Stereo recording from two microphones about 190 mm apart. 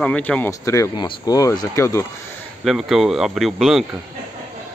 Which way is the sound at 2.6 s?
Centre (ahead or behind).